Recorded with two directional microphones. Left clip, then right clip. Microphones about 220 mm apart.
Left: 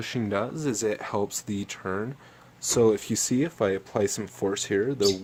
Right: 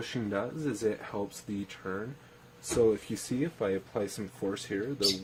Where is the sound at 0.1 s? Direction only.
40° left (ahead or behind).